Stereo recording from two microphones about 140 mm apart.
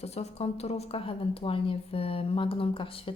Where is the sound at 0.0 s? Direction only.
50° left (ahead or behind).